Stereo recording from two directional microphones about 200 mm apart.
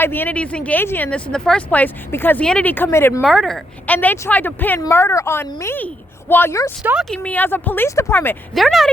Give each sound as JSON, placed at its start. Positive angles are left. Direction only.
{"t": 0.0, "sound": "speech", "side_deg": 10}
{"t": 3.2, "sound": "speech", "side_deg": 0}
{"t": 6.8, "sound": "speech", "side_deg": 0}
{"t": 8.5, "sound": "speech", "side_deg": 0}